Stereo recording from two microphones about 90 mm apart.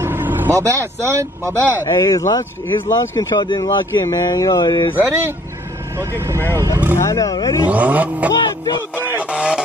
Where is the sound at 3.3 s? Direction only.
55° left (ahead or behind).